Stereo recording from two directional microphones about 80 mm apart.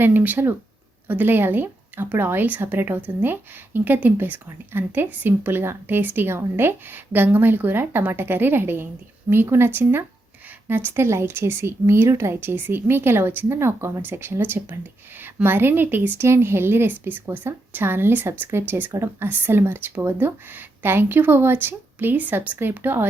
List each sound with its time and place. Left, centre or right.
0.0 s speech: right